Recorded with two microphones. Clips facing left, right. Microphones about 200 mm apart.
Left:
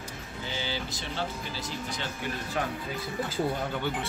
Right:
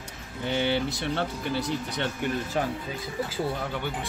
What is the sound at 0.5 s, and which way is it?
Speech, 60° right (ahead or behind).